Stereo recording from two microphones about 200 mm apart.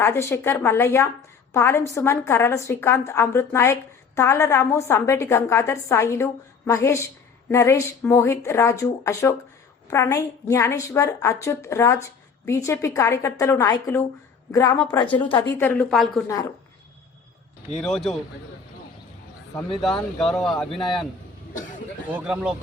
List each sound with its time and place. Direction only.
0.0 s a woman's voice: 10° left (ahead or behind)
15.5 s a woman's voice: 10° left (ahead or behind)
16.2 s a woman's voice: 15° left (ahead or behind)
17.8 s speech: centre (ahead or behind)
19.5 s speech: centre (ahead or behind)
22.1 s speech: 5° right (ahead or behind)